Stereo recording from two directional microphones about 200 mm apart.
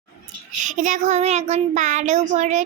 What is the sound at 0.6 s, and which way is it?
A child's voice, 40° right (ahead or behind).